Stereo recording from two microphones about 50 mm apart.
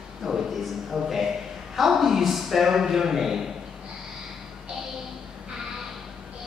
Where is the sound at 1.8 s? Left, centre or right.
Centre.